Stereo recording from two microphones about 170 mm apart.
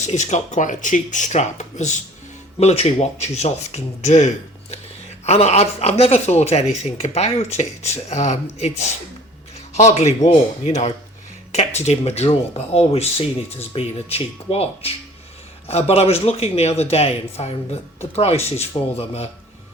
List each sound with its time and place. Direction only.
0.0 s speech: 45° left (ahead or behind)
9.7 s speech: 40° left (ahead or behind)